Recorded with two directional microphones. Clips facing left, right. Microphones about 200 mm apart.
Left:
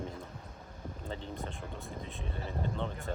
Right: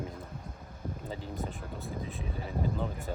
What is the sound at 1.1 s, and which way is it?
Speech, 5° right (ahead or behind).